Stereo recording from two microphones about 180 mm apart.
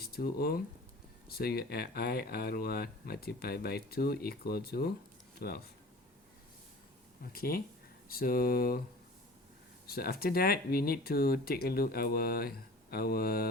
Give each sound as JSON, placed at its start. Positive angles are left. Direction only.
{"t": 0.0, "sound": "speech", "side_deg": 60}
{"t": 7.3, "sound": "speech", "side_deg": 55}
{"t": 9.8, "sound": "speech", "side_deg": 60}